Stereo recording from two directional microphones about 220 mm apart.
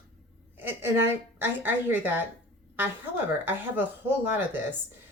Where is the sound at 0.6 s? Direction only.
10° right (ahead or behind).